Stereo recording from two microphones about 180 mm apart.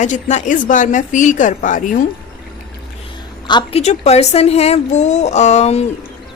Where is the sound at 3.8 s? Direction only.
35° left (ahead or behind).